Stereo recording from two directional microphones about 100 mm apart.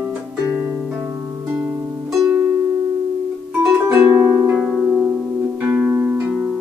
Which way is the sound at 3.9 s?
25° right (ahead or behind).